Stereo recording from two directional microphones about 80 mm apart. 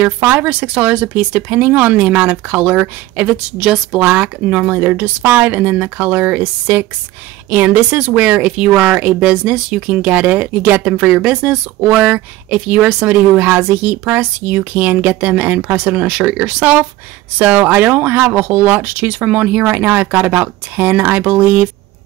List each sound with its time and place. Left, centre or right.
0.0 s speech: right
3.5 s speech: centre
4.0 s speech: centre